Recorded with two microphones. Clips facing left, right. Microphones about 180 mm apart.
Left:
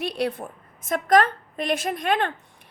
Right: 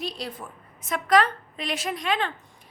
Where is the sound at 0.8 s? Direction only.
50° left (ahead or behind).